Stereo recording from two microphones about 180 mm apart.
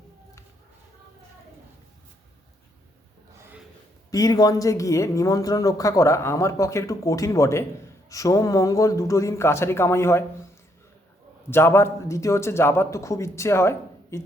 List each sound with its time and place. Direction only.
4.1 s speech: 20° left (ahead or behind)
11.5 s speech: 15° left (ahead or behind)